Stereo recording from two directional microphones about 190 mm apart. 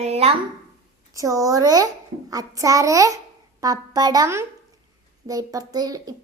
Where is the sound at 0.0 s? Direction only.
35° right (ahead or behind).